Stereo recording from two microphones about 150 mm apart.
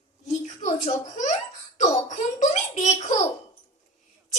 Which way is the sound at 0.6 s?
50° left (ahead or behind).